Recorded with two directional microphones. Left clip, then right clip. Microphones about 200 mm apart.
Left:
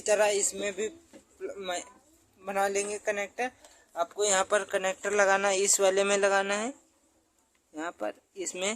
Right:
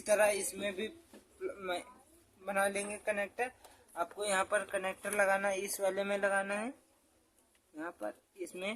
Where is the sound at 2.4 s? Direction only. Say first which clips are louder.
Left 5 dB; 40° left (ahead or behind).